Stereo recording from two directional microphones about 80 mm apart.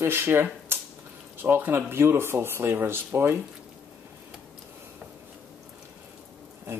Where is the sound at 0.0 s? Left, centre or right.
Right.